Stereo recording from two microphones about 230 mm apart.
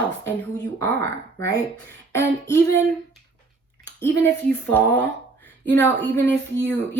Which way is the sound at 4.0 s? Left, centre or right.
Centre.